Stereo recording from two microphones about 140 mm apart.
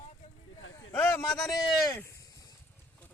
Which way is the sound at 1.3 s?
Centre (ahead or behind).